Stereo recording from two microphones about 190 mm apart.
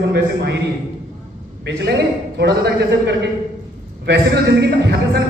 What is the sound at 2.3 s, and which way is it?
A man's voice, 65° right (ahead or behind).